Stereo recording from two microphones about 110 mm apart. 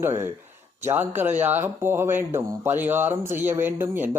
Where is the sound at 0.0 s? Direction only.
20° right (ahead or behind).